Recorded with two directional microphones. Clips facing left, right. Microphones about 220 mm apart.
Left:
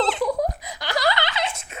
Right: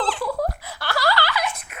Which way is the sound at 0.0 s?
20° left (ahead or behind).